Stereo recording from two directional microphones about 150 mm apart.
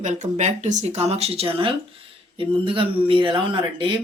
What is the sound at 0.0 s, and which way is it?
Speech, 50° right (ahead or behind).